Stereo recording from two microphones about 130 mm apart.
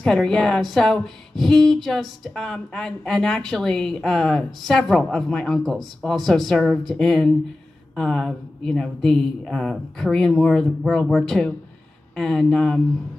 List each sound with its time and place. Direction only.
0.0 s speech: 5° left (ahead or behind)